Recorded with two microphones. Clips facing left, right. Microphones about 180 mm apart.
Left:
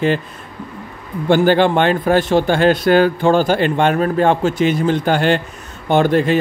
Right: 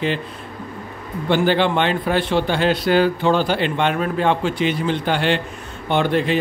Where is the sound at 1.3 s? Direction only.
45° left (ahead or behind).